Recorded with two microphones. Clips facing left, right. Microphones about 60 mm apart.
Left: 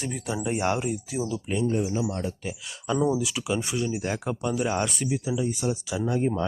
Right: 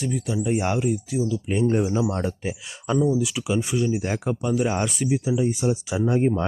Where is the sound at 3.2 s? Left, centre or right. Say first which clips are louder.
Right 3 dB; centre.